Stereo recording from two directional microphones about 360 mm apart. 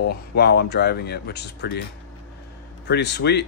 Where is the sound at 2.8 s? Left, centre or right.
Left.